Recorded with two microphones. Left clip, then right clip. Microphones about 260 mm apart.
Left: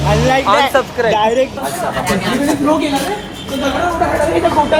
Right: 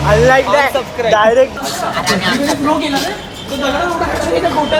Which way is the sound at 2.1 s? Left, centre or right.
Centre.